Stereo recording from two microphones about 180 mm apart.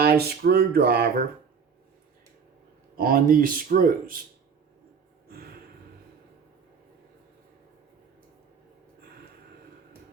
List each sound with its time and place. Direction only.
0.0 s speech: 60° right (ahead or behind)
2.9 s speech: 50° right (ahead or behind)